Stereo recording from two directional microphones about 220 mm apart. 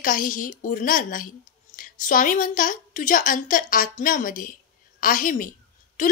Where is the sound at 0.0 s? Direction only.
40° left (ahead or behind).